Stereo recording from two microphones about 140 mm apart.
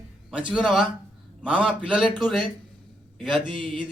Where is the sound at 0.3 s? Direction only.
5° right (ahead or behind).